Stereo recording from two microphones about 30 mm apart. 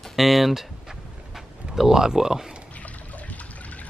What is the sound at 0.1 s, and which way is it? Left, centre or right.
Speech, centre.